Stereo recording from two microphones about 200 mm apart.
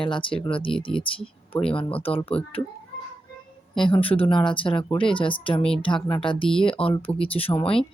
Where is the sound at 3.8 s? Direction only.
25° left (ahead or behind).